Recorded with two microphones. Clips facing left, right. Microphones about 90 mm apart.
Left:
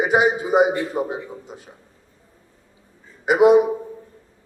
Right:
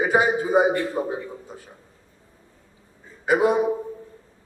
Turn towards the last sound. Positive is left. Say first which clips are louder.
# left 6 dB
turn(degrees=20)  # may be behind; listen again after turning